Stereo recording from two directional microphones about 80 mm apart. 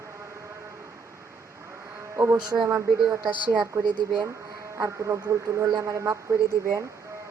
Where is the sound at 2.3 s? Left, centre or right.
Right.